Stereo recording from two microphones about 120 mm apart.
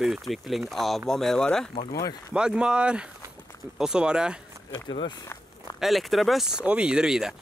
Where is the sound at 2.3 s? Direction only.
5° right (ahead or behind).